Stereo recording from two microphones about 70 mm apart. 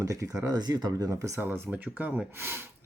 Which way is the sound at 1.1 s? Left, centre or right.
Right.